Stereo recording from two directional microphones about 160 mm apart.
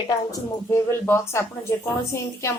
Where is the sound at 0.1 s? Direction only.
20° left (ahead or behind).